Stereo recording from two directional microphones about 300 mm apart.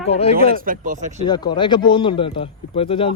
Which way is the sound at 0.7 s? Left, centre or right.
Right.